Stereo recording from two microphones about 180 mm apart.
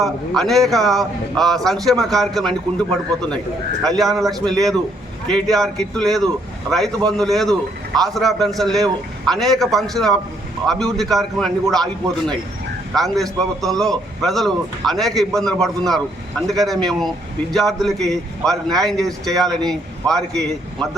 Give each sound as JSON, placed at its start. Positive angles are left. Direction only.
{"t": 0.0, "sound": "speech", "side_deg": 0}
{"t": 12.9, "sound": "speech", "side_deg": 0}